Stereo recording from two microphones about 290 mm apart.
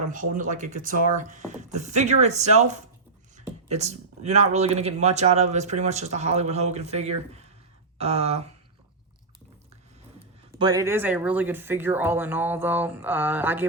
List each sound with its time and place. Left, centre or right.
0.1 s speech: right
10.6 s speech: centre